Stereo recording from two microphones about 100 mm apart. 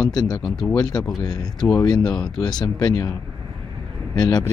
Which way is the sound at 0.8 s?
40° left (ahead or behind).